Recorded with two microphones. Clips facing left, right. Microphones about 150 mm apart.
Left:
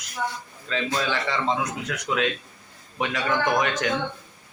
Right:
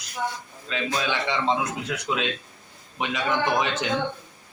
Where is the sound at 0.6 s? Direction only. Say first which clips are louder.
Left 1 dB; 15° right (ahead or behind).